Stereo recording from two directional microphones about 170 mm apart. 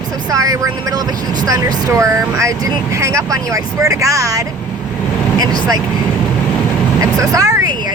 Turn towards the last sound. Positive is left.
turn(degrees=-20)  # may be behind; listen again after turning